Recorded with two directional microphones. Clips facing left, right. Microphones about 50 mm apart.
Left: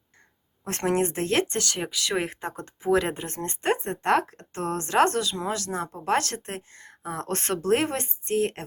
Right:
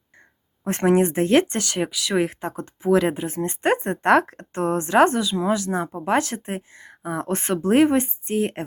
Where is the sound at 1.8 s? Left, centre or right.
Centre.